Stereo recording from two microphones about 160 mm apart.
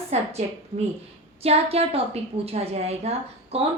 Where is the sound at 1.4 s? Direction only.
40° right (ahead or behind).